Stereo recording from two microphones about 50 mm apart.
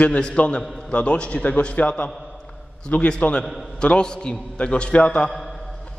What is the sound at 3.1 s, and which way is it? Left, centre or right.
A man's voice, left.